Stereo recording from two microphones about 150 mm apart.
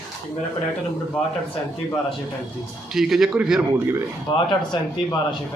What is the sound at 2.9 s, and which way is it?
Speech, centre (ahead or behind).